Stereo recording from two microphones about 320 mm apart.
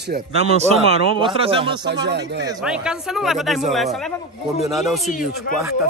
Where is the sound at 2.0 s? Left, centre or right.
Right.